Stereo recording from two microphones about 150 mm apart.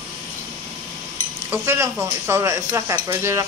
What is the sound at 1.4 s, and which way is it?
Speech, 15° right (ahead or behind).